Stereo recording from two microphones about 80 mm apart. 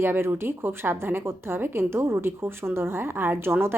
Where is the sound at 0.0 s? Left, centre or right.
Right.